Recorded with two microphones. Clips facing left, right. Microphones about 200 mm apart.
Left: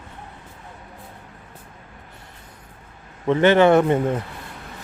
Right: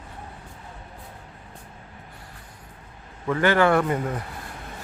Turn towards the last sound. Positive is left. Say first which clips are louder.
# left 5 dB
turn(degrees=25)  # may be behind; listen again after turning